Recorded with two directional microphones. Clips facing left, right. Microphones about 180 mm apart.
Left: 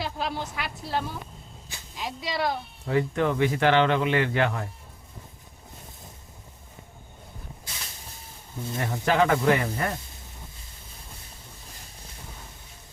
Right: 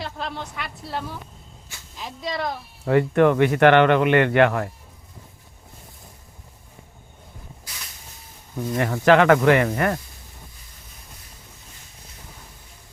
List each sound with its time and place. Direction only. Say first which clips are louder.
0.0 s a woman's voice: left 1 dB; 5° left (ahead or behind)
2.8 s speech: right 8 dB; 60° right (ahead or behind)
8.7 s speech: right 8 dB; 85° right